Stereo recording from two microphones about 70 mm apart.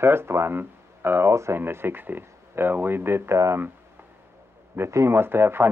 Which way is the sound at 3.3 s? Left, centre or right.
Right.